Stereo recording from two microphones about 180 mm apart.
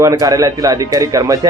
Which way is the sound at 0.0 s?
20° right (ahead or behind).